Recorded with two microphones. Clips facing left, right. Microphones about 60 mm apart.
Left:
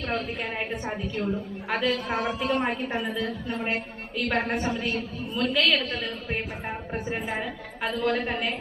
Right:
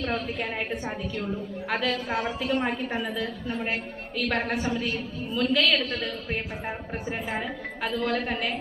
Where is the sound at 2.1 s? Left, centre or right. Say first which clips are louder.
Left 1 dB; left.